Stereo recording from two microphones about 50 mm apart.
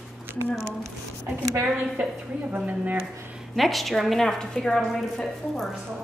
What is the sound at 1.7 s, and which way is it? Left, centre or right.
A woman's voice, right.